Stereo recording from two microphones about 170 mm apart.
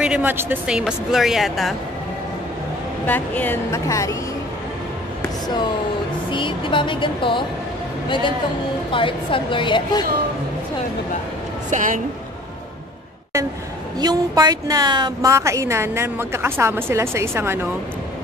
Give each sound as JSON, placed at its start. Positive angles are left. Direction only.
{"t": 0.0, "sound": "speech", "side_deg": -10}
{"t": 3.1, "sound": "a woman's voice", "side_deg": 10}
{"t": 6.3, "sound": "speech", "side_deg": 30}
{"t": 8.9, "sound": "speech", "side_deg": 30}
{"t": 11.7, "sound": "a woman's voice", "side_deg": -50}
{"t": 13.9, "sound": "a woman's voice", "side_deg": -25}